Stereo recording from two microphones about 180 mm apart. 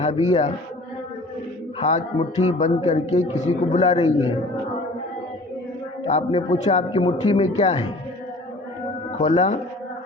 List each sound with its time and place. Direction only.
0.0 s a man's voice: 35° left (ahead or behind)
1.8 s a man's voice: 35° left (ahead or behind)
6.1 s a man's voice: 35° left (ahead or behind)
6.9 s a man's voice: 25° left (ahead or behind)
9.1 s a man's voice: 30° left (ahead or behind)